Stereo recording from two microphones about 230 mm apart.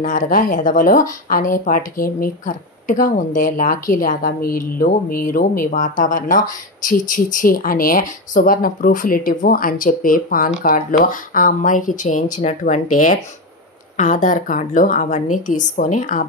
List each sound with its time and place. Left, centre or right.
0.0 s speech: left